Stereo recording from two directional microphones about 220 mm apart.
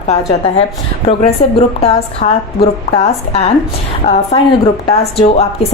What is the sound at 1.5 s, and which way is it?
A woman's voice, 25° left (ahead or behind).